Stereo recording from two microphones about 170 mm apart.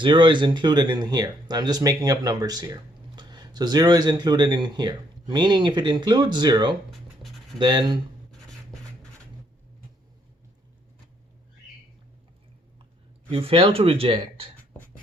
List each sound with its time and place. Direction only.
0.0 s speech: 30° right (ahead or behind)
6.9 s scratch: centre (ahead or behind)
7.6 s speech: 25° right (ahead or behind)
13.3 s speech: 35° right (ahead or behind)